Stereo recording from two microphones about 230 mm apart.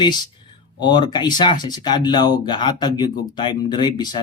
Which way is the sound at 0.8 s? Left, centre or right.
Centre.